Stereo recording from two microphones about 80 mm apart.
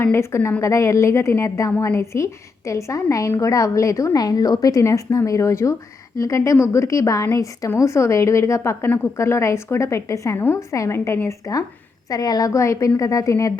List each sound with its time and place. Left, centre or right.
0.0 s a woman's voice: left
12.1 s a woman's voice: left